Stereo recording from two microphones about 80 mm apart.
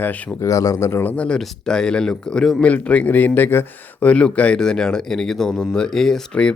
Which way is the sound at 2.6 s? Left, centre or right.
Centre.